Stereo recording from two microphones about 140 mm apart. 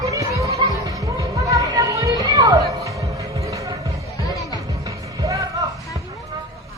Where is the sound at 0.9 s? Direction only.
25° right (ahead or behind).